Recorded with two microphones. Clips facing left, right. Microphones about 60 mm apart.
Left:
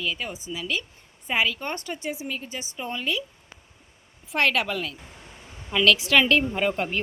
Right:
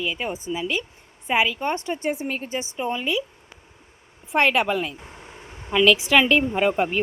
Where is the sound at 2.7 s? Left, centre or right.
Centre.